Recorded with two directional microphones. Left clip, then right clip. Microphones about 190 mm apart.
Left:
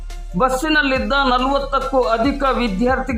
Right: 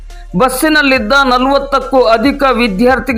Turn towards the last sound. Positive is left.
turn(degrees=-25)  # may be behind; listen again after turning